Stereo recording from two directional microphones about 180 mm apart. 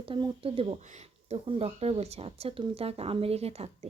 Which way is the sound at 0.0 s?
30° right (ahead or behind).